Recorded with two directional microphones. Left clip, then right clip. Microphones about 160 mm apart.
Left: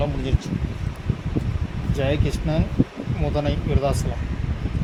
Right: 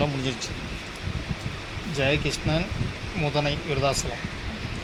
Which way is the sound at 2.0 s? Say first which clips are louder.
Even; 25° left (ahead or behind).